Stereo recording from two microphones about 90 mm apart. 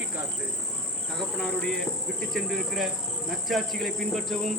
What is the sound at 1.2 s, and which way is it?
Speech, 5° left (ahead or behind).